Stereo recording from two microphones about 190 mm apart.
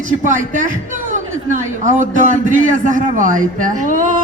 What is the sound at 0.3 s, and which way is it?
A man's voice, 45° right (ahead or behind).